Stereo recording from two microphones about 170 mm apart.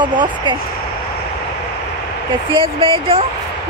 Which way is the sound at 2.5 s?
30° right (ahead or behind).